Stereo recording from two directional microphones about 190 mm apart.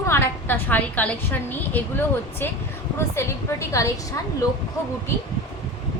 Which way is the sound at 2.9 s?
15° left (ahead or behind).